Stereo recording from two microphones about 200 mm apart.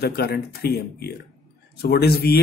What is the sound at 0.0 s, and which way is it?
Speech, 50° left (ahead or behind).